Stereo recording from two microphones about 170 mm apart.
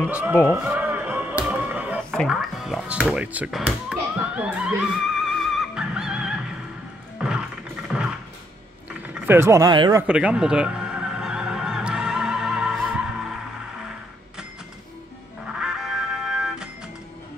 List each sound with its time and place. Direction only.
0.0 s speech: 10° right (ahead or behind)
0.5 s music: 10° right (ahead or behind)
2.0 s speech: centre (ahead or behind)
7.2 s music: 5° right (ahead or behind)
7.9 s a sound: centre (ahead or behind)
9.1 s speech: 10° right (ahead or behind)
10.0 s music: 5° right (ahead or behind)
15.4 s music: 5° right (ahead or behind)